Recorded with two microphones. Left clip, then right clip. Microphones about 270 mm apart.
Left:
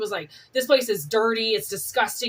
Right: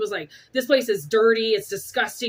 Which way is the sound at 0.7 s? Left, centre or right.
Centre.